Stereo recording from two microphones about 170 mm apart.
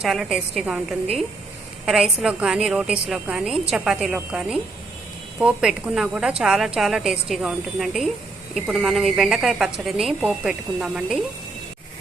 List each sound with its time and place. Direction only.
0.0 s a woman's voice: centre (ahead or behind)